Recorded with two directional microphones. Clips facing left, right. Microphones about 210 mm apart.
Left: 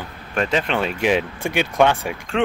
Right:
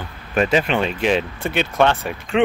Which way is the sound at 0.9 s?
10° left (ahead or behind).